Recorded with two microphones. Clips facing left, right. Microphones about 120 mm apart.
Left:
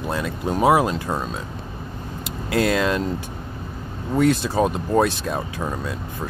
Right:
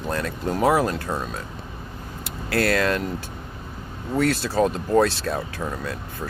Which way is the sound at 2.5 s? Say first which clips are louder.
Left 1 dB; 15° left (ahead or behind).